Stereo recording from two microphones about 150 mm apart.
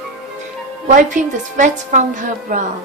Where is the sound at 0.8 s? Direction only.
55° right (ahead or behind).